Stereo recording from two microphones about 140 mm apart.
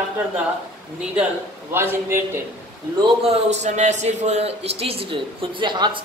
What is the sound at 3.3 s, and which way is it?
Speech, 55° right (ahead or behind).